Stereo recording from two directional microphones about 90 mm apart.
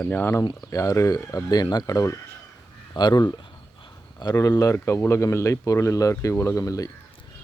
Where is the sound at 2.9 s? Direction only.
50° left (ahead or behind).